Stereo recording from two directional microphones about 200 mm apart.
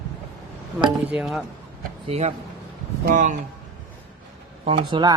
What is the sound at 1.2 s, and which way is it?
Speech, centre (ahead or behind).